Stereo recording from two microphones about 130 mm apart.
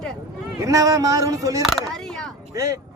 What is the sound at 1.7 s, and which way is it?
Speech, 5° left (ahead or behind).